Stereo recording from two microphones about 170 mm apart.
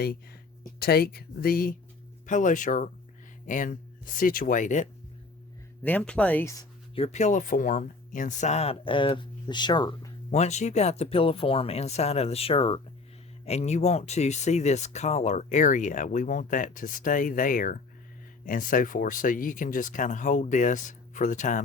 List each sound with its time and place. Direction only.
0.8 s speech: 65° left (ahead or behind)
2.2 s speech: 50° left (ahead or behind)
5.8 s speech: 10° left (ahead or behind)
6.9 s speech: 40° left (ahead or behind)
10.3 s speech: 40° left (ahead or behind)